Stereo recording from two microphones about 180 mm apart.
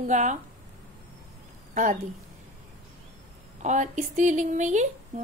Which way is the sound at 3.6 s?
45° right (ahead or behind).